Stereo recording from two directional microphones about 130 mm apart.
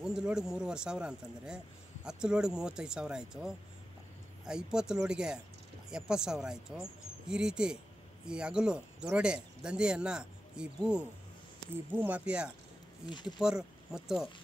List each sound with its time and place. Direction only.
0.0 s speech: 5° right (ahead or behind)
13.1 s speech: 35° left (ahead or behind)
13.4 s speech: 5° right (ahead or behind)